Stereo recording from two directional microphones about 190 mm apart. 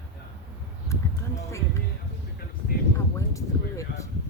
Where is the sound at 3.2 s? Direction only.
15° left (ahead or behind).